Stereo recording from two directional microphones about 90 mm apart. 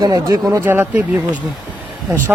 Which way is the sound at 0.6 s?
25° right (ahead or behind).